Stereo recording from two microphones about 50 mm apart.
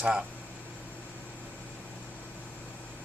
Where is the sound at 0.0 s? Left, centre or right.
Centre.